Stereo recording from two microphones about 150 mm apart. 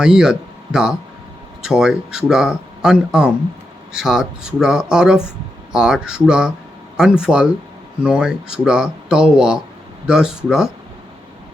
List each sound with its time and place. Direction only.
0.0 s speech: 5° right (ahead or behind)